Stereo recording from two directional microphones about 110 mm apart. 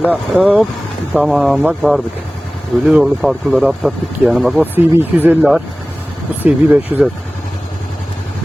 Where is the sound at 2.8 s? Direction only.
5° right (ahead or behind).